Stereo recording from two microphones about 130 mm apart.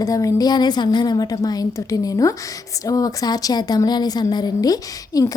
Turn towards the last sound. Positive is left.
turn(degrees=30)  # may be behind; listen again after turning